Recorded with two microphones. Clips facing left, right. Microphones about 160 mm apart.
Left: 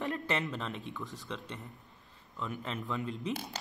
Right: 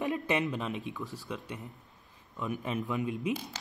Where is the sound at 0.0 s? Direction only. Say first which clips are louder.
Right 4 dB; 15° right (ahead or behind).